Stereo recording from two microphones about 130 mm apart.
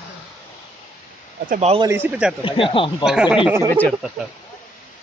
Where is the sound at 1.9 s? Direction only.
10° right (ahead or behind).